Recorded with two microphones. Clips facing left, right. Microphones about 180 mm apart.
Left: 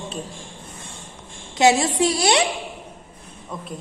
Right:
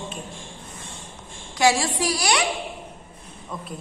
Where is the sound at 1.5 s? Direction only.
20° left (ahead or behind).